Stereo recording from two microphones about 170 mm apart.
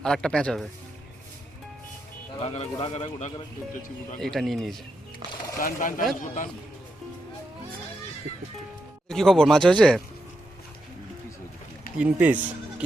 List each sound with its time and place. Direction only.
0.0 s speech: 5° left (ahead or behind)
2.4 s speech: 40° left (ahead or behind)
4.2 s speech: centre (ahead or behind)
5.5 s speech: 50° left (ahead or behind)
9.0 s speech: centre (ahead or behind)
11.9 s speech: 10° right (ahead or behind)